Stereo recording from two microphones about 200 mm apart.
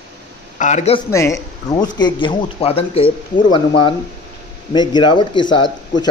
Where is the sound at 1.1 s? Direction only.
15° left (ahead or behind).